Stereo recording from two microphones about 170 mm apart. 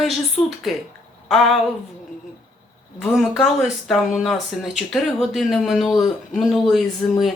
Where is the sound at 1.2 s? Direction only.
Centre (ahead or behind).